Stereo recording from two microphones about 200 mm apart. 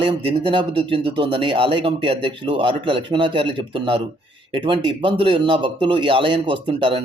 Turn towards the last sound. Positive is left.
turn(degrees=-25)  # may be behind; listen again after turning